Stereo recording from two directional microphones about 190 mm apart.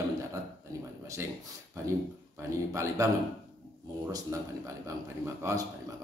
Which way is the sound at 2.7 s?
15° right (ahead or behind).